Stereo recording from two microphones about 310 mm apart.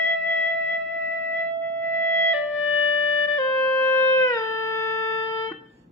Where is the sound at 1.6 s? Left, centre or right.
Centre.